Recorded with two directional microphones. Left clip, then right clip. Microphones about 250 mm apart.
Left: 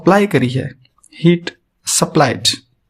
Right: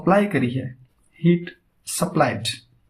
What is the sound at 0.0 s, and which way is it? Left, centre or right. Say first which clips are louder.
Speech: left 6 dB; left.